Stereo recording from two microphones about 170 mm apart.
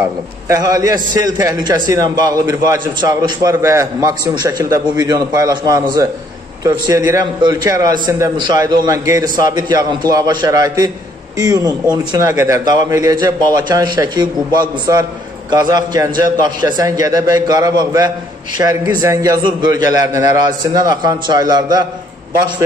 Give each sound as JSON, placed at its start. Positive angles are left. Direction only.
{"t": 0.5, "sound": "a man's voice", "side_deg": -20}